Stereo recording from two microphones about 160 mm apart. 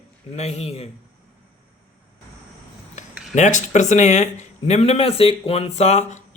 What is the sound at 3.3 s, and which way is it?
Speech, 50° left (ahead or behind).